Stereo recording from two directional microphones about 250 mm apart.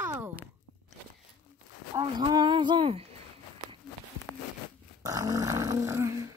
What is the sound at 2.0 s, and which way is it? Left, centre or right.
Speech, centre.